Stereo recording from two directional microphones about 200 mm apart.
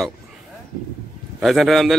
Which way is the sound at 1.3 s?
Centre (ahead or behind).